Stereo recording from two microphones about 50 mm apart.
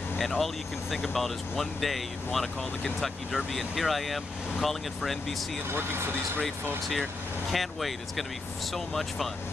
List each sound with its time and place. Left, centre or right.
0.2 s speech: centre
5.7 s speech: right
7.5 s speech: centre